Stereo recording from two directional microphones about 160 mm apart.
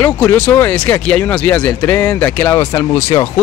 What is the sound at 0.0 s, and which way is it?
Speech, 15° left (ahead or behind).